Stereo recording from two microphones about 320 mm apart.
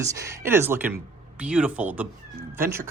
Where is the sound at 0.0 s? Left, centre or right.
Centre.